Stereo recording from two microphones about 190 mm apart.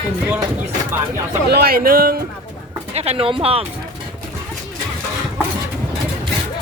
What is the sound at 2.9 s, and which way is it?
Speech, 30° right (ahead or behind).